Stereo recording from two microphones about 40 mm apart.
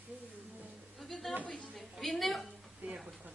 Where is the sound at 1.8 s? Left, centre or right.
Centre.